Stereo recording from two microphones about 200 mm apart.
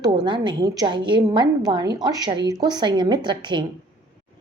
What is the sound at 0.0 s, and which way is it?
Speech, 20° right (ahead or behind).